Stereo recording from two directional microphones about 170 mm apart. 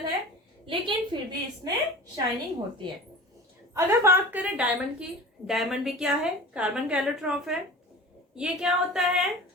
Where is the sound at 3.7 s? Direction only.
15° right (ahead or behind).